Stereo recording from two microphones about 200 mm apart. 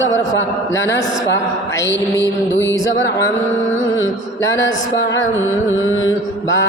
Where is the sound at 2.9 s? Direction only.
65° left (ahead or behind).